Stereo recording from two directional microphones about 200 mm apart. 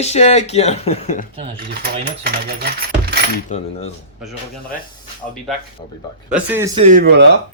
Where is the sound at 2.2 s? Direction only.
45° right (ahead or behind).